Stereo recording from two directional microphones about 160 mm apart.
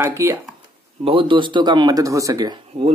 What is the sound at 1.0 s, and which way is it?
Speech, 30° right (ahead or behind).